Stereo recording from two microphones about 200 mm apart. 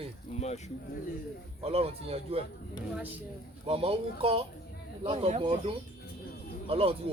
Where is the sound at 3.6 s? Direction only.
30° right (ahead or behind).